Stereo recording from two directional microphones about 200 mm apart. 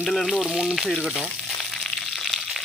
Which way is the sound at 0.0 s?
Centre (ahead or behind).